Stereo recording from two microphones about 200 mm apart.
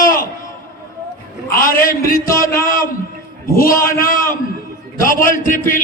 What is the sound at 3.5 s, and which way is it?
A man's voice, 45° left (ahead or behind).